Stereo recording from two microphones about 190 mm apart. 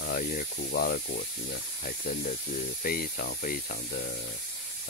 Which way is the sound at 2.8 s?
50° left (ahead or behind).